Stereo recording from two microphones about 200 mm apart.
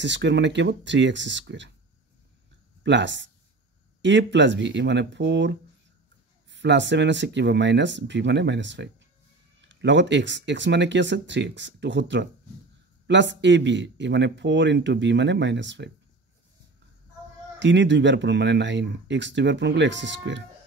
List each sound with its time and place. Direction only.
0.0 s speech: 65° right (ahead or behind)
2.8 s speech: 65° right (ahead or behind)
17.6 s speech: 65° right (ahead or behind)